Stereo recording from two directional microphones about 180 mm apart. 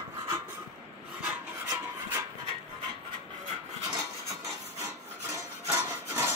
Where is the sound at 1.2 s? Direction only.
10° right (ahead or behind).